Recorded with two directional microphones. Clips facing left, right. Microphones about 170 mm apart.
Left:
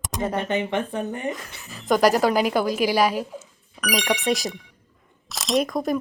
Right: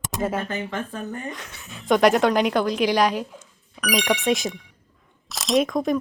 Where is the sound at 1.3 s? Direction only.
Centre (ahead or behind).